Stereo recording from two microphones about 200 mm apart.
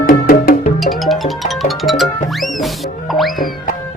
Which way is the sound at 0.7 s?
Centre (ahead or behind).